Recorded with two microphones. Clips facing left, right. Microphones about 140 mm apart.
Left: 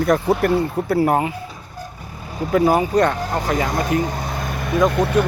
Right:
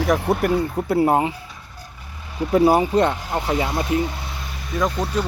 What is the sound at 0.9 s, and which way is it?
Speech, 20° right (ahead or behind).